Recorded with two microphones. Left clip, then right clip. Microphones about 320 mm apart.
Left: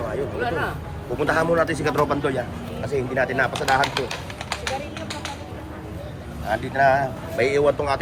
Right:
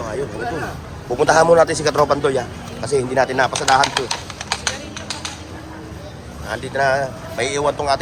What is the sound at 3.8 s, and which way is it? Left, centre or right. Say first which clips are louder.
Speech: right 5 dB; right.